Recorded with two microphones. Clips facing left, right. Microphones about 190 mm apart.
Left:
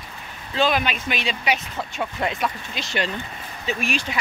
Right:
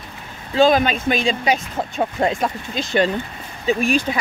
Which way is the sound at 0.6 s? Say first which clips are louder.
Right 7 dB; 40° right (ahead or behind).